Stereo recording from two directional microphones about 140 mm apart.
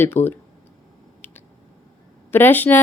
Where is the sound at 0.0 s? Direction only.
15° left (ahead or behind).